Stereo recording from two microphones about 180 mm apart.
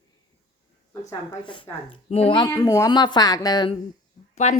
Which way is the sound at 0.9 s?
20° left (ahead or behind).